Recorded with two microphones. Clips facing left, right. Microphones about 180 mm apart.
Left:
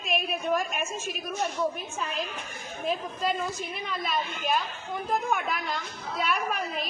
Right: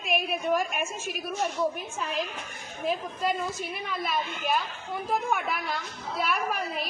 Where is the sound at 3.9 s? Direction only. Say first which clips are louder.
Even; 5° right (ahead or behind).